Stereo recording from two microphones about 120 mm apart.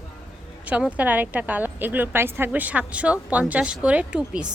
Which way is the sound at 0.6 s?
10° right (ahead or behind).